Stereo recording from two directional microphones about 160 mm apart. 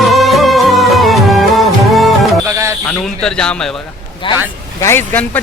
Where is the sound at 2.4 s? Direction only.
15° right (ahead or behind).